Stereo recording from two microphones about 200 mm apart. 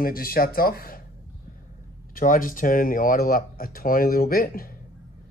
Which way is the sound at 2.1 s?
45° left (ahead or behind).